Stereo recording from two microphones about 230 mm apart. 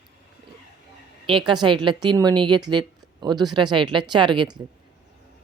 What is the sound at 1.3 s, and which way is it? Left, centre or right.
Speech, right.